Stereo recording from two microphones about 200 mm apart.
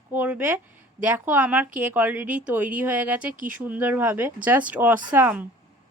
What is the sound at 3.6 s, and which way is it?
Speech, 10° right (ahead or behind).